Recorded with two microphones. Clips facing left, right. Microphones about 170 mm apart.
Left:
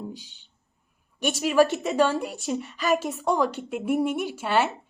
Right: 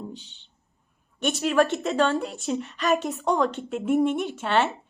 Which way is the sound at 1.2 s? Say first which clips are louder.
Left 1 dB; 10° left (ahead or behind).